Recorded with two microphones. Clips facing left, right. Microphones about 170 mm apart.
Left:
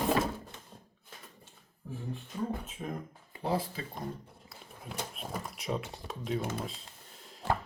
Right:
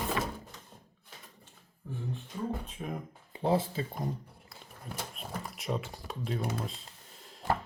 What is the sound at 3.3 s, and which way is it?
Speech, 25° right (ahead or behind).